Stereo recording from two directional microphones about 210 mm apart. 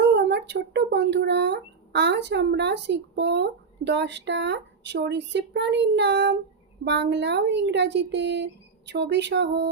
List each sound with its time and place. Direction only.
0.1 s speech: 55° right (ahead or behind)